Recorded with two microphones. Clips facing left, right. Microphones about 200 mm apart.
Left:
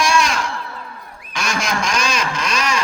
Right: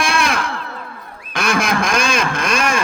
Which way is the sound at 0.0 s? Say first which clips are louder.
Left 1 dB; 55° right (ahead or behind).